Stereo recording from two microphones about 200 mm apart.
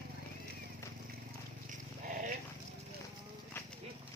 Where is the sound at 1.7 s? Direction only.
40° right (ahead or behind).